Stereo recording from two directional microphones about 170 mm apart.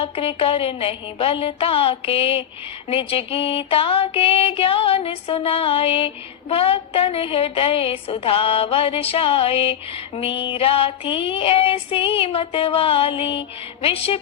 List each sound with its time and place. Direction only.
0.0 s a woman's voice: 35° left (ahead or behind)